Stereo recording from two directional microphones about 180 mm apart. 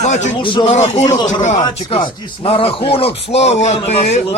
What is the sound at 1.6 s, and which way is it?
A man's voice, 30° left (ahead or behind).